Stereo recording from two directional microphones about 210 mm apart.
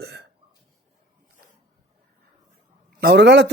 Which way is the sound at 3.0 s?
50° right (ahead or behind).